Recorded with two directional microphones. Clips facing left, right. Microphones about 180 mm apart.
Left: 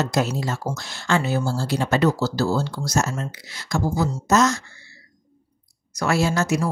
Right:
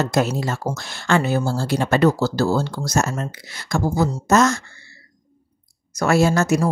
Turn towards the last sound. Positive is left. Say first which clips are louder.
# right 4 dB
turn(degrees=-50)  # may be behind; listen again after turning